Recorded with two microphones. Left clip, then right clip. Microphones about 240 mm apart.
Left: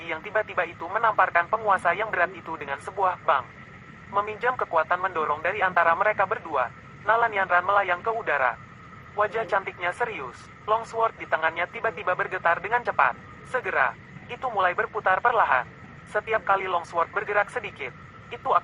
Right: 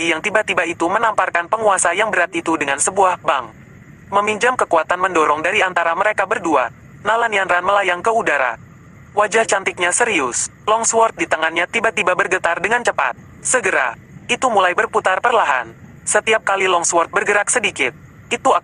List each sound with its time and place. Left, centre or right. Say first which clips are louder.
0.0 s speech: right 11 dB; right